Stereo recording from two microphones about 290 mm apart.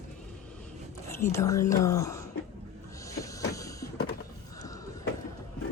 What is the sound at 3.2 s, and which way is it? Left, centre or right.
Vehicle, centre.